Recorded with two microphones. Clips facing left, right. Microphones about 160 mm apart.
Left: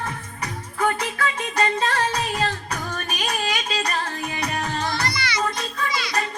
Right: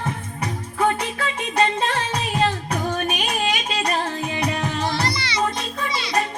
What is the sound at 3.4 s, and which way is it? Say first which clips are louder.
Music: right 2 dB; 25° right (ahead or behind).